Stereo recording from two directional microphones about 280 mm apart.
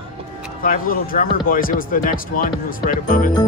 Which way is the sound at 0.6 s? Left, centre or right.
Left.